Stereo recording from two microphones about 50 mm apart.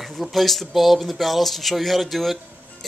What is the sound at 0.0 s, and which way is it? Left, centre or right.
Speech, centre.